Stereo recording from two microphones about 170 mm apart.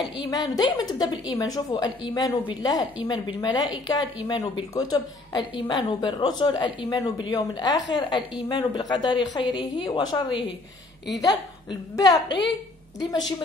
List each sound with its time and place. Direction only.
0.0 s a woman's voice: 25° left (ahead or behind)